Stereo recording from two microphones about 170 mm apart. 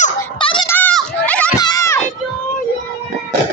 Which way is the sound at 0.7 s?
10° left (ahead or behind).